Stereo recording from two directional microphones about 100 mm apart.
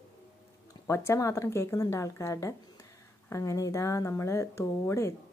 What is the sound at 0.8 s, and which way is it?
Speech, 25° left (ahead or behind).